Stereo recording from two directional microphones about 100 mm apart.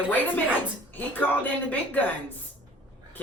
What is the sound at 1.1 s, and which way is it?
A woman's voice, 20° left (ahead or behind).